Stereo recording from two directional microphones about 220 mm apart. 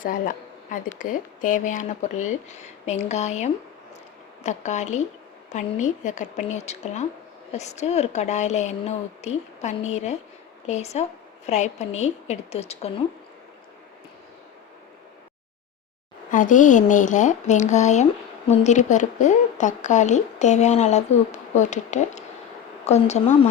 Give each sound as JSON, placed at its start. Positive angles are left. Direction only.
{"t": 0.0, "sound": "a woman's voice", "side_deg": 40}
{"t": 16.3, "sound": "a woman's voice", "side_deg": 35}